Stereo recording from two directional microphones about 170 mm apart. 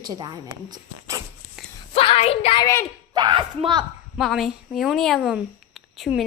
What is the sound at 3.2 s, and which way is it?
Speech, 25° right (ahead or behind).